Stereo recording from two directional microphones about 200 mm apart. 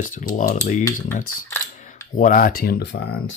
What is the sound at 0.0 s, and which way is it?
Speech, 40° left (ahead or behind).